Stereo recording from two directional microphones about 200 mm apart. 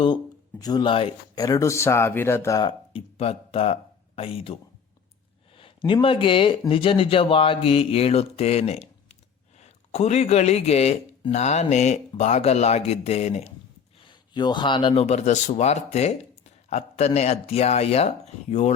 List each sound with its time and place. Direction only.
0.6 s speech: 20° left (ahead or behind)
5.5 s speech: 25° left (ahead or behind)
15.0 s speech: 35° left (ahead or behind)